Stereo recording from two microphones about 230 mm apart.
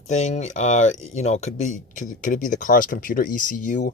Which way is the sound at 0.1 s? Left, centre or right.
Left.